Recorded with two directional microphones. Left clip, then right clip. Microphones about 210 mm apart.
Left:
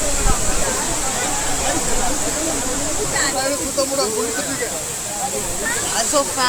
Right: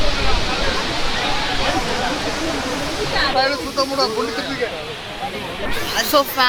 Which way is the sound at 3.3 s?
15° right (ahead or behind).